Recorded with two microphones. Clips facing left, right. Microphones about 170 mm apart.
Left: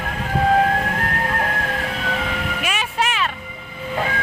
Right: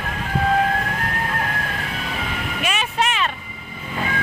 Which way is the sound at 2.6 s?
5° left (ahead or behind).